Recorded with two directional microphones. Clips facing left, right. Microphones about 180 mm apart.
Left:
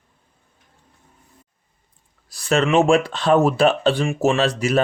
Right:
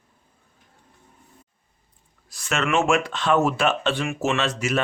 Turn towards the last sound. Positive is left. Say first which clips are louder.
# left 5 dB
turn(degrees=35)  # may be behind; listen again after turning